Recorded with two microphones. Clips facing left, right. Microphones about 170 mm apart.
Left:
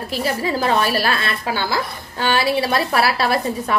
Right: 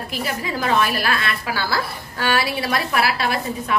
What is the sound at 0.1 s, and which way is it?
A woman's voice, 30° left (ahead or behind).